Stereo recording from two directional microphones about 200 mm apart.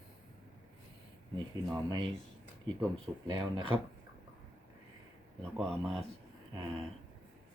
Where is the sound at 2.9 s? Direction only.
25° right (ahead or behind).